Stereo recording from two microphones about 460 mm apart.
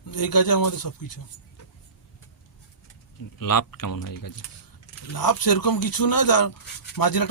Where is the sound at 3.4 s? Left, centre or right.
Left.